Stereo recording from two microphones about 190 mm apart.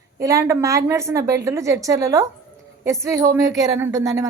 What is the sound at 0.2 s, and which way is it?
A woman's voice, 15° right (ahead or behind).